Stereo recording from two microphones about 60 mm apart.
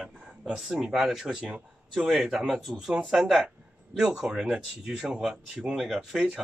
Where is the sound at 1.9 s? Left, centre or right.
Centre.